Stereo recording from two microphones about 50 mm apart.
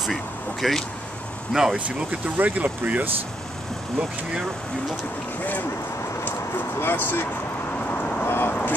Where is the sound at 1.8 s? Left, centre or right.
Right.